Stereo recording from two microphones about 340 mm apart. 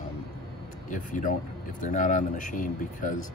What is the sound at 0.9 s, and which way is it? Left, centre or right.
Speech, left.